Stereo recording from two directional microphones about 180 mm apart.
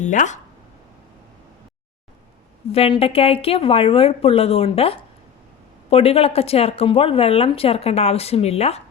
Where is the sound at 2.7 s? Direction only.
30° left (ahead or behind).